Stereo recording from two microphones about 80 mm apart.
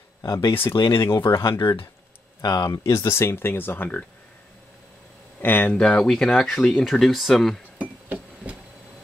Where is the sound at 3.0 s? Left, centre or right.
Left.